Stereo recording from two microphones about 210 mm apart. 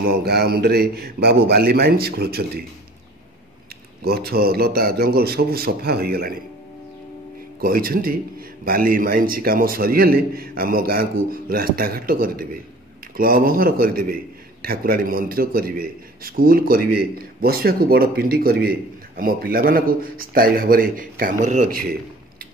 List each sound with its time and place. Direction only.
0.0 s a man's voice: 45° right (ahead or behind)
4.0 s a man's voice: 45° right (ahead or behind)
7.6 s a man's voice: 45° right (ahead or behind)